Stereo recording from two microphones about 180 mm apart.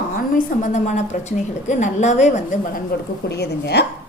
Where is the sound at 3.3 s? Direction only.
65° left (ahead or behind).